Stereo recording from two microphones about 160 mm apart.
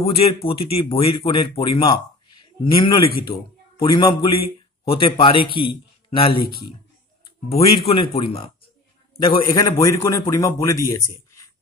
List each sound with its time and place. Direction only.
0.0 s a man's voice: 35° left (ahead or behind)
2.6 s a man's voice: 30° left (ahead or behind)
7.4 s a man's voice: 35° left (ahead or behind)
9.5 s a man's voice: 20° left (ahead or behind)